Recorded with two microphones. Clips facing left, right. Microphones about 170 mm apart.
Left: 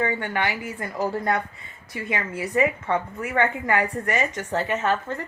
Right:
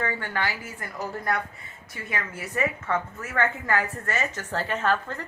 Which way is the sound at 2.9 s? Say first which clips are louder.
Left 4 dB; 15° left (ahead or behind).